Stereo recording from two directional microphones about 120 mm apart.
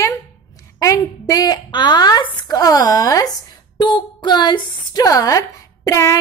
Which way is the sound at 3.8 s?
40° left (ahead or behind).